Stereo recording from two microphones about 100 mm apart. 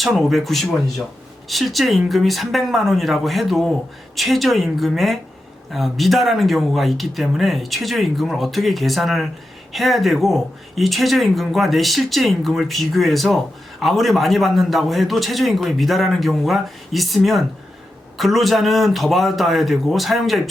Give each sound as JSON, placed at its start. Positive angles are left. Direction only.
{"t": 0.0, "sound": "speech", "side_deg": 0}